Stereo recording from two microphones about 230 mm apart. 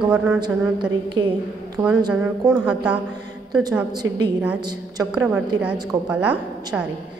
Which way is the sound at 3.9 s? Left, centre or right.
Centre.